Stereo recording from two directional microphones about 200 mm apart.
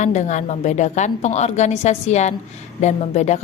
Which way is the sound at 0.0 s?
35° left (ahead or behind).